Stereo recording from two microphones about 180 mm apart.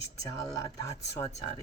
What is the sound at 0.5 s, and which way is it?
Speech, 15° left (ahead or behind).